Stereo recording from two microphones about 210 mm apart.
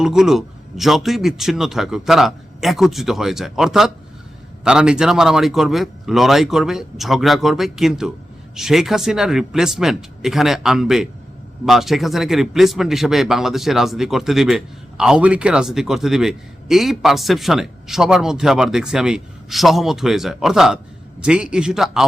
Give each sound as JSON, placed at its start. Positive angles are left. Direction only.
{"t": 0.0, "sound": "a man's voice", "side_deg": 0}